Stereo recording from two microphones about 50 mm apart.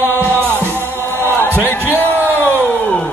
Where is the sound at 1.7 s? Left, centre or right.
Left.